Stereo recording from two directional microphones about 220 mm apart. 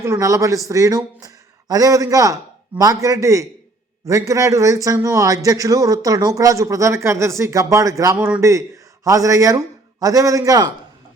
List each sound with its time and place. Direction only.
0.0 s a man's voice: 15° right (ahead or behind)